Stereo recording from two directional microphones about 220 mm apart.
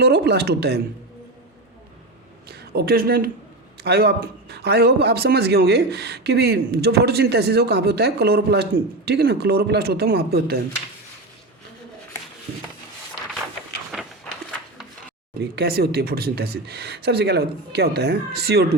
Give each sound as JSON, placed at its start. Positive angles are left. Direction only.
{"t": 0.0, "sound": "a man's voice", "side_deg": -50}
{"t": 2.5, "sound": "a man's voice", "side_deg": -45}
{"t": 15.4, "sound": "a man's voice", "side_deg": -45}